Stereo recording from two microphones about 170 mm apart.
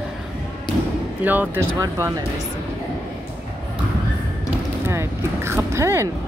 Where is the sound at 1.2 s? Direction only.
10° right (ahead or behind).